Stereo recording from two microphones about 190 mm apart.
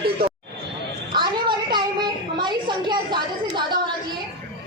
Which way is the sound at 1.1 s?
25° right (ahead or behind).